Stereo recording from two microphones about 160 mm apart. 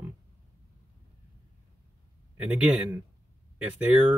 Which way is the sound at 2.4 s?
10° right (ahead or behind).